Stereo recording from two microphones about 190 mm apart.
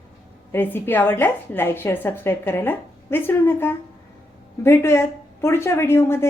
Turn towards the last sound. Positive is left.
turn(degrees=15)  # may be behind; listen again after turning